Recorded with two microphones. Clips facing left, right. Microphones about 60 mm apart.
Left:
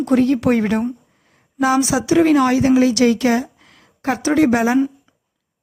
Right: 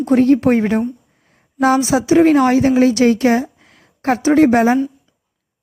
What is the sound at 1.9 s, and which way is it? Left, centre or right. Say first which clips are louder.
Speech: right 3 dB; right.